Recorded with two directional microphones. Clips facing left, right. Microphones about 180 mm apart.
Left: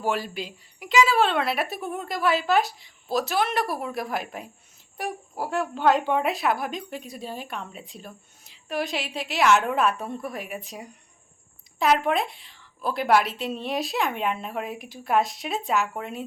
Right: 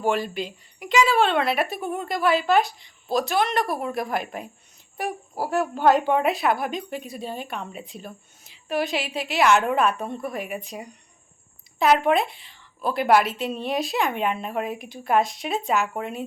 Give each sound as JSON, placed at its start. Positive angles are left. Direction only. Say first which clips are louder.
{"t": 0.0, "sound": "a woman's voice", "louder": "right 3 dB", "side_deg": 5}
{"t": 5.5, "sound": "a woman's voice", "louder": "right 3 dB", "side_deg": -40}
{"t": 5.8, "sound": "a woman's voice", "louder": "right 2 dB", "side_deg": 0}